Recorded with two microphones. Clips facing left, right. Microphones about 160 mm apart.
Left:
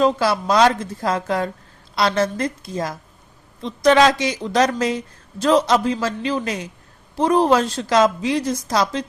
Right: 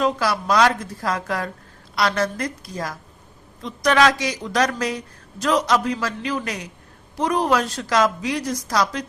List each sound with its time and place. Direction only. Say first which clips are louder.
0.0 s a woman's voice: left 4 dB; 25° left (ahead or behind)